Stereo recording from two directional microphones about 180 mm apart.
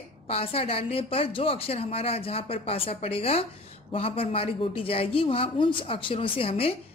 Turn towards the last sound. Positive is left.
turn(degrees=30)  # may be behind; listen again after turning